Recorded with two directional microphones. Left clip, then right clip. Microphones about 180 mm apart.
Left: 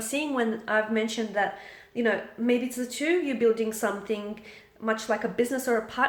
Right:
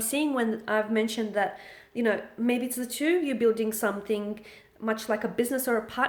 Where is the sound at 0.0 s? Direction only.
45° right (ahead or behind).